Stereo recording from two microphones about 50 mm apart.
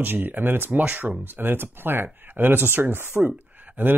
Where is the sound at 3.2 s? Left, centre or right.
Right.